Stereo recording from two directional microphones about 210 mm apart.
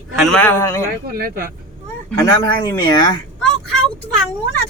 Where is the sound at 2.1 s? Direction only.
15° left (ahead or behind).